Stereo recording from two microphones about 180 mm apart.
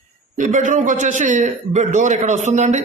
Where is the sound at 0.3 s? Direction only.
45° right (ahead or behind).